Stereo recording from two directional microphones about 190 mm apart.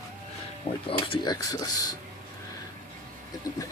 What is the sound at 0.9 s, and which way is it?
Speech, 25° left (ahead or behind).